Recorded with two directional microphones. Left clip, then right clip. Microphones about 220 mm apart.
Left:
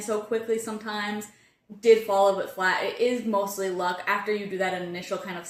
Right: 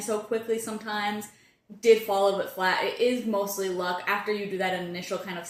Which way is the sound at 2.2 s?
10° left (ahead or behind).